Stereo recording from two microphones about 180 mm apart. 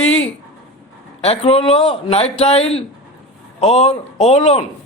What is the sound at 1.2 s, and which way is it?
Speech, 35° left (ahead or behind).